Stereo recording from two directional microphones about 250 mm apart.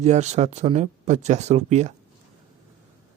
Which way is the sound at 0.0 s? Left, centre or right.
Right.